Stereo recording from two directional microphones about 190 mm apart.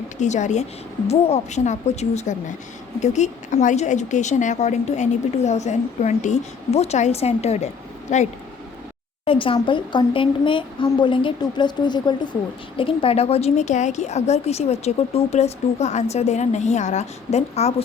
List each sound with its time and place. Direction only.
0.2 s speech: 40° left (ahead or behind)
9.2 s speech: 30° left (ahead or behind)